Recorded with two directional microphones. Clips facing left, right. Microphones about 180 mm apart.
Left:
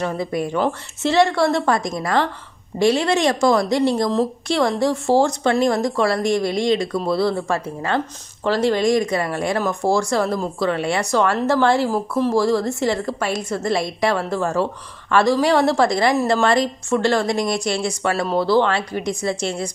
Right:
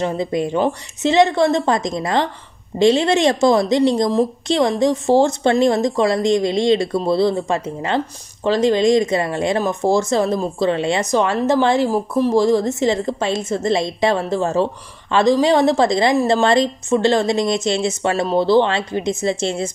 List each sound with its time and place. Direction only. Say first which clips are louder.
0.0 s speech: right 3 dB; 20° right (ahead or behind)